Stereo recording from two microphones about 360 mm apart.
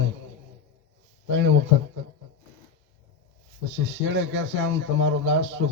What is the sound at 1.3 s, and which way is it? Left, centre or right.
Speech, right.